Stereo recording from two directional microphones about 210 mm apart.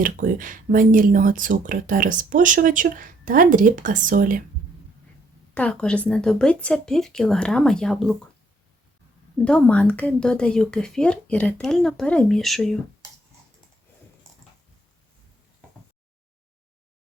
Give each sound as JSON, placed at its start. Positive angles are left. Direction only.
{"t": 0.0, "sound": "speech", "side_deg": -40}
{"t": 5.5, "sound": "speech", "side_deg": 5}
{"t": 9.4, "sound": "speech", "side_deg": 5}